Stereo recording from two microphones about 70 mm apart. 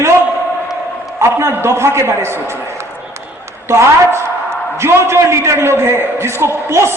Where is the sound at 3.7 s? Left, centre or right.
Right.